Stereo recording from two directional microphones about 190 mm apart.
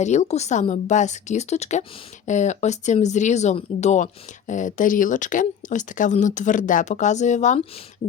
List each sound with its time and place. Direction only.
0.0 s speech: 35° left (ahead or behind)